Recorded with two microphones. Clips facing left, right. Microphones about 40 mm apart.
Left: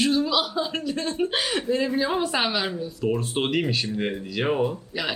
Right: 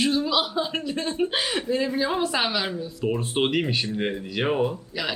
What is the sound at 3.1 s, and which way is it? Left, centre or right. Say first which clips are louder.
Speech: right 2 dB; centre.